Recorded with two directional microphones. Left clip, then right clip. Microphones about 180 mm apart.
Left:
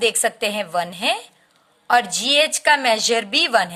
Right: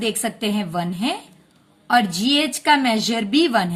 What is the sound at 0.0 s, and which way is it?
A woman's voice, 35° left (ahead or behind).